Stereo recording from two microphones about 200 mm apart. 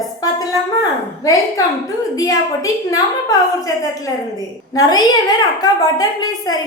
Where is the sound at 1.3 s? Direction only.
15° left (ahead or behind).